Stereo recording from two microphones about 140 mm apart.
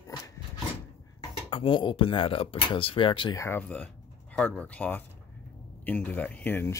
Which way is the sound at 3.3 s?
20° left (ahead or behind).